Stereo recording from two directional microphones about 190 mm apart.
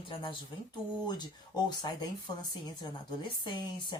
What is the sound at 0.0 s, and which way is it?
Speech, 25° left (ahead or behind).